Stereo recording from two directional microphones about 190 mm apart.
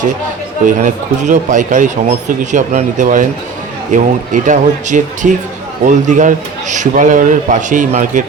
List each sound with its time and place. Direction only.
0.6 s a man's voice: 40° right (ahead or behind)